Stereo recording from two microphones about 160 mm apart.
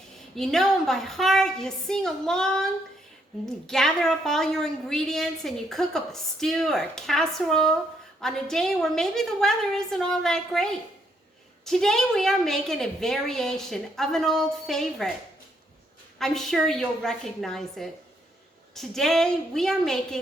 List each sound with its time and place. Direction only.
0.3 s a woman's voice: centre (ahead or behind)
3.7 s a woman's voice: centre (ahead or behind)
16.1 s a woman's voice: centre (ahead or behind)